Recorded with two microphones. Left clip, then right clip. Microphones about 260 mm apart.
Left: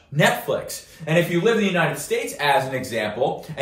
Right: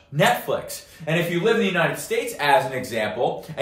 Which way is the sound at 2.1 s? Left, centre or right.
Centre.